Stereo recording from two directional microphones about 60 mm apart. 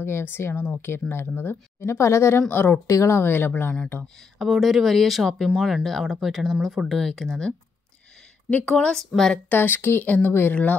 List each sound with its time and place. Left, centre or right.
0.0 s speech: left
1.9 s speech: left
2.5 s speech: left
2.9 s speech: left
4.4 s speech: centre
8.6 s speech: centre
9.5 s speech: left
10.0 s speech: left